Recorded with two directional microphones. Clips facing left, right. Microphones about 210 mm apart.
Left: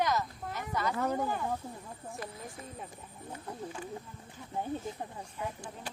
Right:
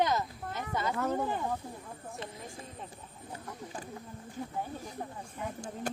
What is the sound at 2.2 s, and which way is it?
Speech, 25° right (ahead or behind).